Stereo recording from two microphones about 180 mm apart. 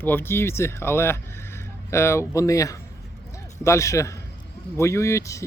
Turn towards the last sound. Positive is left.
turn(degrees=15)  # may be behind; listen again after turning